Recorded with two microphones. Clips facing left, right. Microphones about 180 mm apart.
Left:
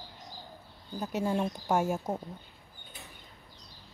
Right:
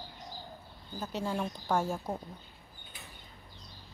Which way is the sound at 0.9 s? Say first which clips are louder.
Left 4 dB; 15° left (ahead or behind).